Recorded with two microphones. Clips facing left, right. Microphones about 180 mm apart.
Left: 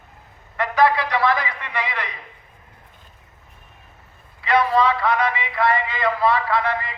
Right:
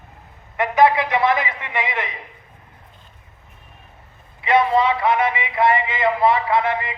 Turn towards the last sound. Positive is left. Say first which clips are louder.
# right 2 dB
turn(degrees=-20)  # may be behind; listen again after turning